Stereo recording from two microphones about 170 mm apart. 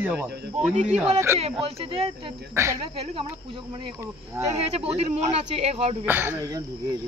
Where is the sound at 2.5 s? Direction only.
15° right (ahead or behind).